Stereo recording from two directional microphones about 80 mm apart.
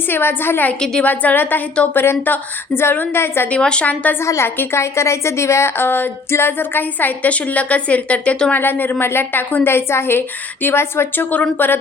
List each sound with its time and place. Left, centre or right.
0.1 s a woman's voice: left
3.5 s a woman's voice: centre
4.3 s a woman's voice: left